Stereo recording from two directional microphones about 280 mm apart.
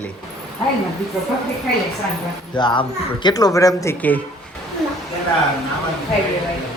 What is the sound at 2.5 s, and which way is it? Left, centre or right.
Speech, centre.